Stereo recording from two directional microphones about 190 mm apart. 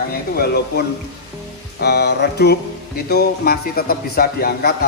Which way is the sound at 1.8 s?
60° left (ahead or behind).